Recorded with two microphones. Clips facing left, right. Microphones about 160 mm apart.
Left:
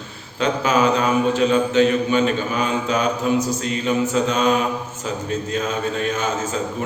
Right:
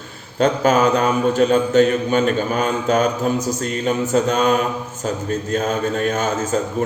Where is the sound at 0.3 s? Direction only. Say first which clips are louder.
Right 3 dB; 45° right (ahead or behind).